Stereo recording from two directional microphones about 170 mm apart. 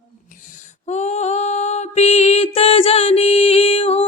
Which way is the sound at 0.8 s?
40° left (ahead or behind).